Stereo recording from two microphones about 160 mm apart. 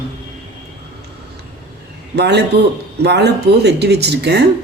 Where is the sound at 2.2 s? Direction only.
90° right.